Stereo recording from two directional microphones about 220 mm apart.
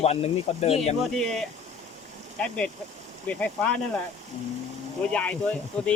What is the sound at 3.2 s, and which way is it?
Speech, 5° left (ahead or behind).